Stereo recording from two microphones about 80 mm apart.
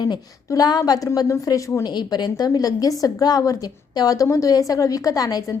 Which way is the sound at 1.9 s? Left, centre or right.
Left.